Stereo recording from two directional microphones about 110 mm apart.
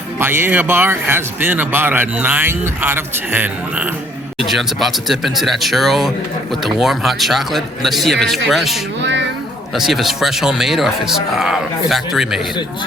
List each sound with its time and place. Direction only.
0.2 s speech: 20° right (ahead or behind)
4.4 s speech: centre (ahead or behind)